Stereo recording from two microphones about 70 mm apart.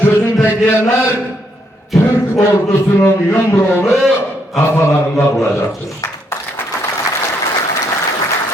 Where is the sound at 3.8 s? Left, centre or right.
Centre.